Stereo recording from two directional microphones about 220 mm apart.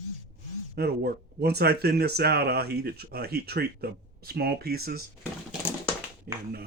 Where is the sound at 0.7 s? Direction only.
45° right (ahead or behind).